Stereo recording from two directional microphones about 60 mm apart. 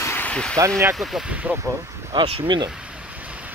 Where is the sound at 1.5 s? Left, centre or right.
Right.